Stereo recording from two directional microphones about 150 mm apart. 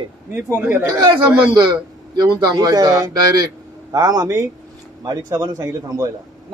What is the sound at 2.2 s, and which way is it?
Speech, 25° right (ahead or behind).